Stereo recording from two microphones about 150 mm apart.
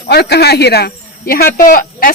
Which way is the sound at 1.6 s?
65° left (ahead or behind).